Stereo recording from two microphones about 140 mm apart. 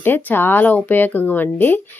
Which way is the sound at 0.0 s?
15° left (ahead or behind).